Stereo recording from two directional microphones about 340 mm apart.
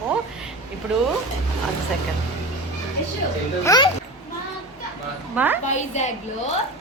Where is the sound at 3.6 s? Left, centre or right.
Centre.